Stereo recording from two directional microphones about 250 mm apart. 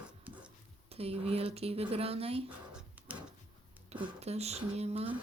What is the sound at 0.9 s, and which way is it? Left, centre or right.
A woman's voice, right.